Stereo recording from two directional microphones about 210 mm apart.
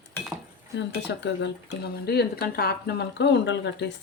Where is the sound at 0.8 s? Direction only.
55° left (ahead or behind).